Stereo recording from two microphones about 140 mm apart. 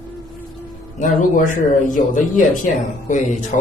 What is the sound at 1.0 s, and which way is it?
A man's voice, 70° left (ahead or behind).